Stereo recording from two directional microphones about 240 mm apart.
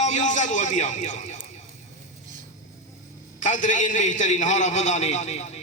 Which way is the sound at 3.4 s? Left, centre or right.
Left.